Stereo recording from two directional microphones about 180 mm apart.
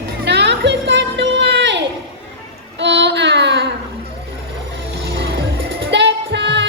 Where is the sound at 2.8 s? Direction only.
80° right.